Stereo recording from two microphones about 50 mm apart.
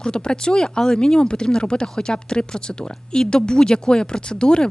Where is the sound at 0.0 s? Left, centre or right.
Centre.